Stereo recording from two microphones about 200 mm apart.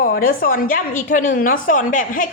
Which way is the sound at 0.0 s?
45° left (ahead or behind).